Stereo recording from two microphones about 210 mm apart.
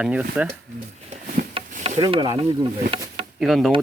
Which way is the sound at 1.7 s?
35° right (ahead or behind).